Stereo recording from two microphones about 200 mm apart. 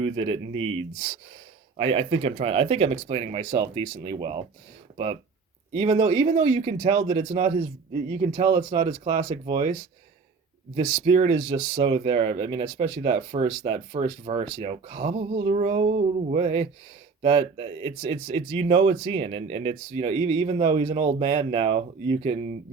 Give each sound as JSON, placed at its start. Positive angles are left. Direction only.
{"t": 0.0, "sound": "speech", "side_deg": -25}
{"t": 5.7, "sound": "speech", "side_deg": -30}
{"t": 8.9, "sound": "speech", "side_deg": -35}
{"t": 10.8, "sound": "speech", "side_deg": -30}